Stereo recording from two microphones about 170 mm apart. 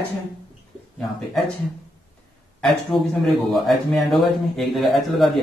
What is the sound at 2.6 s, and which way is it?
A man's voice, centre (ahead or behind).